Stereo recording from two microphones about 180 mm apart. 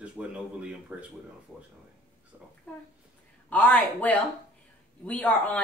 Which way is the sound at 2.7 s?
10° left (ahead or behind).